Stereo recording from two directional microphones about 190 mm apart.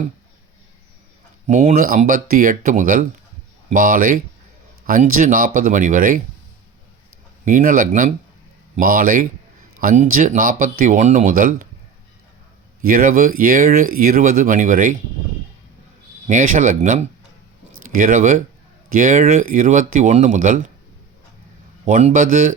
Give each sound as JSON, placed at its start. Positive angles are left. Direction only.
{"t": 1.5, "sound": "speech", "side_deg": -40}
{"t": 7.4, "sound": "speech", "side_deg": -45}
{"t": 12.8, "sound": "speech", "side_deg": -50}
{"t": 16.2, "sound": "speech", "side_deg": -40}
{"t": 21.8, "sound": "speech", "side_deg": -40}